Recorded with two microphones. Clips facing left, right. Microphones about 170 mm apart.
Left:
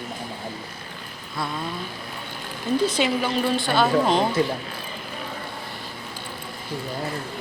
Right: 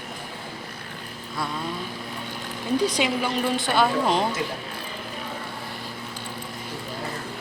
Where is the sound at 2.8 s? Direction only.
10° right (ahead or behind).